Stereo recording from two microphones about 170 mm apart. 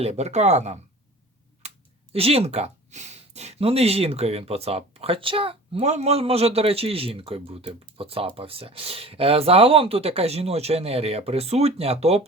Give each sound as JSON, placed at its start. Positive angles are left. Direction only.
{"t": 0.0, "sound": "speech", "side_deg": -40}
{"t": 1.6, "sound": "a sound", "side_deg": -40}
{"t": 2.1, "sound": "speech", "side_deg": -35}